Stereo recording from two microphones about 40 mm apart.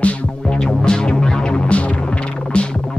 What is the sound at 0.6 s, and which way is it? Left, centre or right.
Music, centre.